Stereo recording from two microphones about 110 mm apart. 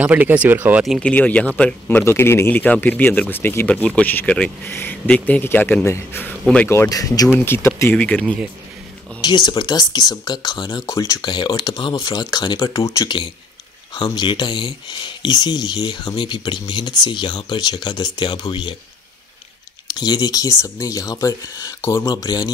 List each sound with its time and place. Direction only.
0.0 s speech: 15° right (ahead or behind)
1.0 s a man's voice: 15° left (ahead or behind); by 7.2 s 30° left (ahead or behind)
7.3 s speech: 20° left (ahead or behind)
8.0 s a man's voice: 10° left (ahead or behind)
9.2 s speech: 40° left (ahead or behind)
11.2 s speech: 45° left (ahead or behind)
19.9 s speech: 40° left (ahead or behind)
22.1 s speech: 40° left (ahead or behind)